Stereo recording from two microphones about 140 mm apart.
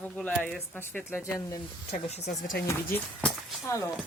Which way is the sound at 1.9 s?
50° left (ahead or behind).